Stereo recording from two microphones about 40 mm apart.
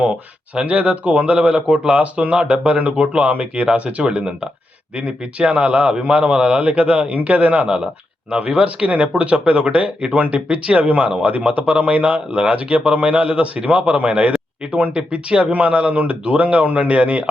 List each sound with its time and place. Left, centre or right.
0.5 s a man's voice: right
5.4 s a man's voice: right